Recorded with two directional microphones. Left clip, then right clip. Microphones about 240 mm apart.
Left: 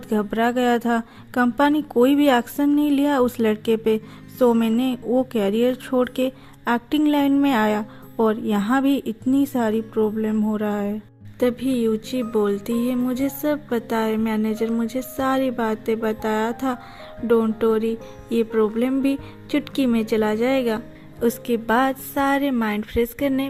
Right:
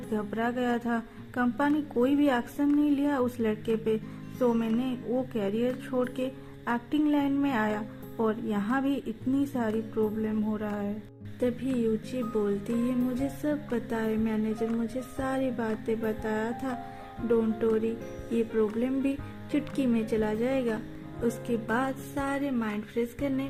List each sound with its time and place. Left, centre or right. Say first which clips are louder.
0.1 s a woman's voice: left 10 dB; left